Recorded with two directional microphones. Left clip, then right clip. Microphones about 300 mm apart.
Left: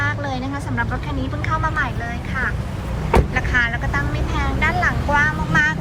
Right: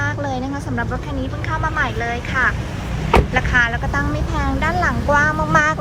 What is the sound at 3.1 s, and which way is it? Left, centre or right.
Speech, centre.